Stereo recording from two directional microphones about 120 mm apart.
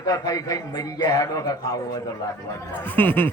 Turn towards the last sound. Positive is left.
turn(degrees=15)  # may be behind; listen again after turning